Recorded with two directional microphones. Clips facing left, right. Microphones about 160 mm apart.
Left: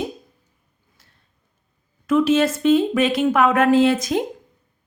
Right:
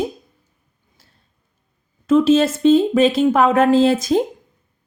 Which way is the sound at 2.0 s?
25° right (ahead or behind).